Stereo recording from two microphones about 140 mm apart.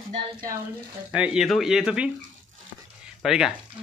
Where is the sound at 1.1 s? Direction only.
5° right (ahead or behind).